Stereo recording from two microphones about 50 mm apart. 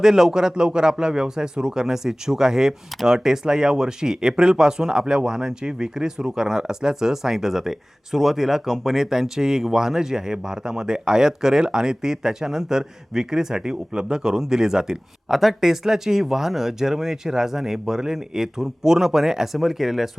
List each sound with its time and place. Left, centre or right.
0.0 s speech: centre